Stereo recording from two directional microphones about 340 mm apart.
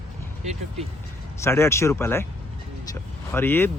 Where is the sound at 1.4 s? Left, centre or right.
Centre.